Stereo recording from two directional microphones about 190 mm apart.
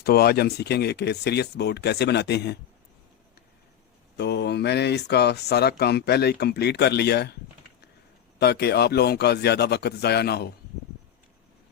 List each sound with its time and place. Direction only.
0.0 s speech: 55° left (ahead or behind)
4.2 s speech: 60° left (ahead or behind)
8.4 s speech: 60° left (ahead or behind)